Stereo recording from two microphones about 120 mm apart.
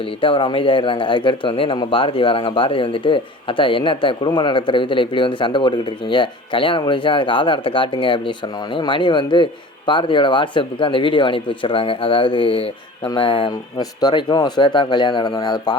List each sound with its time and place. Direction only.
0.2 s speech: 45° left (ahead or behind)